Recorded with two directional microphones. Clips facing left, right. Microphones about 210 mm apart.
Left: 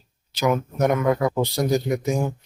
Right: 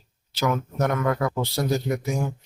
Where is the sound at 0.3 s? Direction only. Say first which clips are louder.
Left 3 dB; 15° left (ahead or behind).